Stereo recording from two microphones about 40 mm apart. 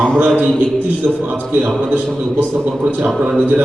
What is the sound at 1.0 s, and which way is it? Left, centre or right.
Speech, right.